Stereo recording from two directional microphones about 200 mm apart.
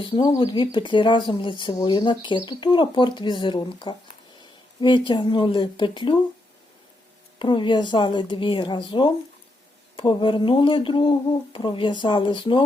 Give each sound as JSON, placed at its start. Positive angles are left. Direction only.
{"t": 0.0, "sound": "speech", "side_deg": 25}
{"t": 7.3, "sound": "speech", "side_deg": 25}